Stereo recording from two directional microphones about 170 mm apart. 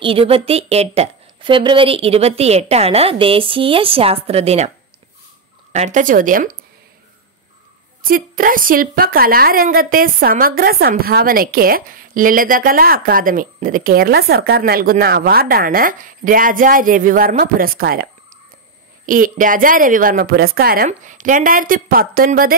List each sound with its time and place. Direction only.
0.0 s a woman's voice: 35° right (ahead or behind); by 6.5 s 50° right (ahead or behind)
8.0 s a woman's voice: 55° right (ahead or behind)
19.0 s a woman's voice: 55° right (ahead or behind)